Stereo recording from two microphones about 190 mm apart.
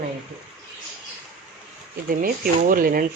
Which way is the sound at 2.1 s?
50° right (ahead or behind).